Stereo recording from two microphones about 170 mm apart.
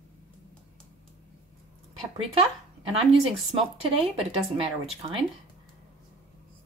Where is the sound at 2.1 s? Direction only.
35° right (ahead or behind).